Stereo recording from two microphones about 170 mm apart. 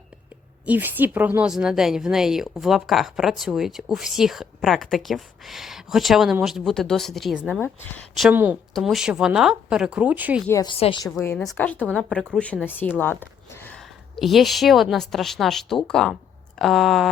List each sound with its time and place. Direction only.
0.6 s speech: 10° right (ahead or behind)
10.5 s a woman's voice: 20° left (ahead or behind)
10.8 s speech: 35° left (ahead or behind)
11.2 s speech: 5° left (ahead or behind)
14.2 s speech: centre (ahead or behind)